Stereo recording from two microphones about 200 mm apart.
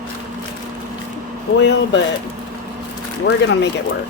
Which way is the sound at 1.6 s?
60° left (ahead or behind).